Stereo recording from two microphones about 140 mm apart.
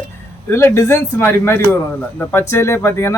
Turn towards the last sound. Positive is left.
turn(degrees=20)  # may be behind; listen again after turning